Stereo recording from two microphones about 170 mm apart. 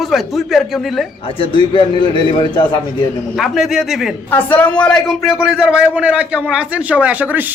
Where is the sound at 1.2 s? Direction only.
30° left (ahead or behind).